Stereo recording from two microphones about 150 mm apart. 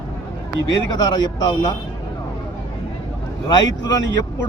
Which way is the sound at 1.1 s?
25° left (ahead or behind).